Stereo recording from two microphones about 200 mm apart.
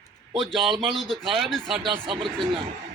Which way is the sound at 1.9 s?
25° right (ahead or behind).